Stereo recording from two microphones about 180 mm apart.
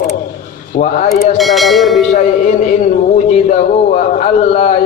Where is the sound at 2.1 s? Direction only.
45° left (ahead or behind).